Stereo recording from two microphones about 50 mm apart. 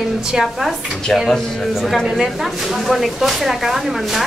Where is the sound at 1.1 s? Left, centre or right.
Centre.